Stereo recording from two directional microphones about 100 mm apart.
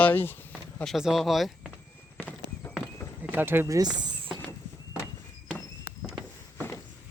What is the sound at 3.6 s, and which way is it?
Speech, 35° right (ahead or behind).